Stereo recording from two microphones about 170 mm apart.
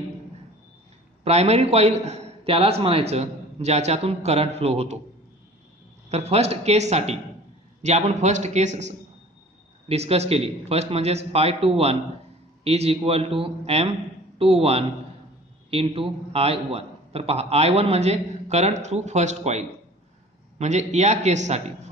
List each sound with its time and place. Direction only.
1.2 s a man's voice: 40° right (ahead or behind)
6.0 s a man's voice: 40° right (ahead or behind)